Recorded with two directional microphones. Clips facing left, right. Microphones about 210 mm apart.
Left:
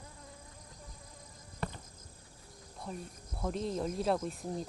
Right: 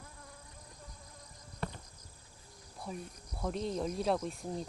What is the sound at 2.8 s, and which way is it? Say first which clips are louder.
Speech: even; centre (ahead or behind).